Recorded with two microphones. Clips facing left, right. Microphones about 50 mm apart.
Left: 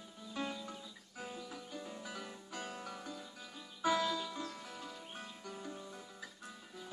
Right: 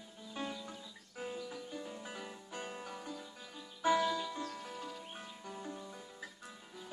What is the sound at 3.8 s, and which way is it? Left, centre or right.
Music, centre.